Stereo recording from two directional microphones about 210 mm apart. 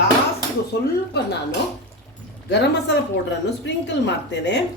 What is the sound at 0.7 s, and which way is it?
Speech, 50° left (ahead or behind).